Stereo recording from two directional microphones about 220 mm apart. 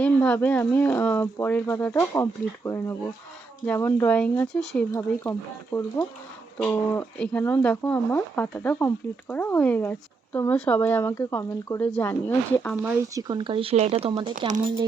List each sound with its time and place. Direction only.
0.0 s speech: 10° left (ahead or behind)
13.1 s speech: 20° right (ahead or behind)